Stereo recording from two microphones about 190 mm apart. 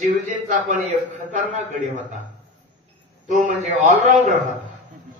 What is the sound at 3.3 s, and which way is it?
A man's voice, 40° right (ahead or behind).